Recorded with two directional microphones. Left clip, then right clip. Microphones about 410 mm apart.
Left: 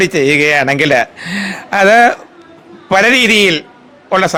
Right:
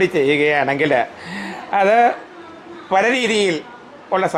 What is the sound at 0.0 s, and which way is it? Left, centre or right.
A man's voice, left.